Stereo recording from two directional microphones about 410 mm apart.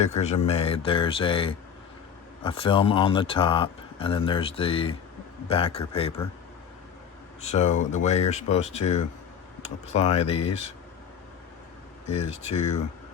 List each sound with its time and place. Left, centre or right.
0.0 s speech: centre
7.5 s speech: centre
12.1 s speech: centre